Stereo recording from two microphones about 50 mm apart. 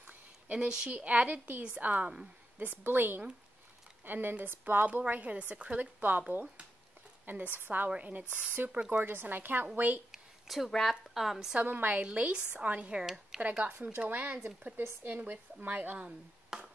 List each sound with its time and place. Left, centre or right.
0.5 s a woman's voice: right
0.9 s speech: right
2.6 s a woman's voice: right
4.8 s a woman's voice: right
8.9 s speech: right
10.1 s a sound: centre
10.7 s speech: centre
11.3 s a woman's voice: centre
11.6 s speech: right
12.0 s a woman's voice: right
13.0 s speech: centre
13.4 s speech: right
16.4 s a sound: centre